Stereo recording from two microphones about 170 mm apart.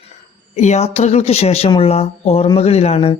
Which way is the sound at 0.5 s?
40° left (ahead or behind).